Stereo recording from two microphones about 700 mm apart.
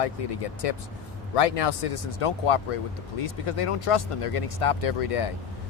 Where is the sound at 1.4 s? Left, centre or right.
Left.